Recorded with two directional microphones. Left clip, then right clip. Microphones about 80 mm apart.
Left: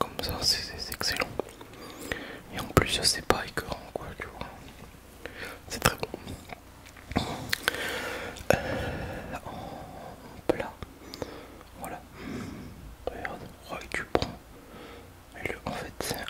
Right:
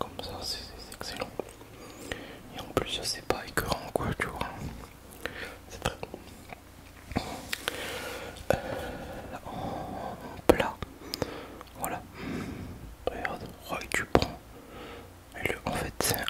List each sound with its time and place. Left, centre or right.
0.0 s whispering: left
1.8 s whispering: centre
2.6 s whispering: left
3.6 s whispering: right
5.7 s whispering: left
7.2 s a sound: left
9.6 s a sound: right
10.4 s whispering: right
10.8 s a sound: centre
13.0 s whispering: centre